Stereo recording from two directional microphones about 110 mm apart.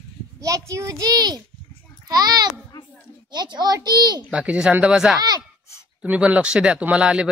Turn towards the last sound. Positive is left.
turn(degrees=-10)  # may be behind; listen again after turning